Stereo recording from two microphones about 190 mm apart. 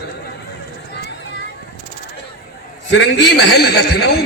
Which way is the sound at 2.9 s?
70° left (ahead or behind).